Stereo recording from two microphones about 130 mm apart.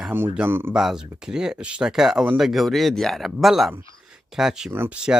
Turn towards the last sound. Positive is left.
turn(degrees=-5)  # may be behind; listen again after turning